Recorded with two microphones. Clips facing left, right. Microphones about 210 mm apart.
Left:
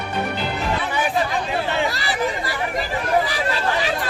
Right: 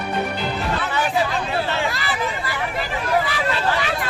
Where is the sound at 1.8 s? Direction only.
35° left (ahead or behind).